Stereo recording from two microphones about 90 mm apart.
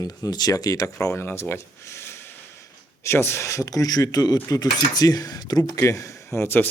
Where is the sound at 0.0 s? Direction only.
45° left (ahead or behind).